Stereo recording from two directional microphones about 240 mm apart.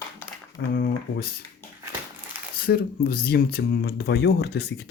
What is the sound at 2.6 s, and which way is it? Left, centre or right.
Speech, left.